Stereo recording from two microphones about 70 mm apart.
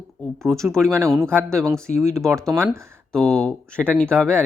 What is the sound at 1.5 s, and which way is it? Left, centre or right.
Speech, right.